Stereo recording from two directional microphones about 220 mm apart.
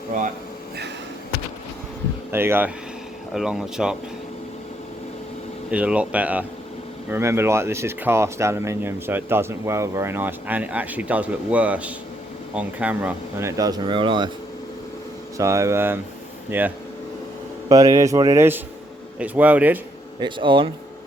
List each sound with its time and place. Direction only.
2.3 s speech: 10° right (ahead or behind)
5.7 s speech: 5° right (ahead or behind); by 14.3 s 20° right (ahead or behind)
15.4 s speech: 15° right (ahead or behind)
20.1 s speech: 20° right (ahead or behind)